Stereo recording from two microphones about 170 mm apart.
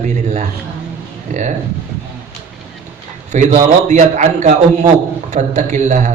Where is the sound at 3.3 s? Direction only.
45° right (ahead or behind).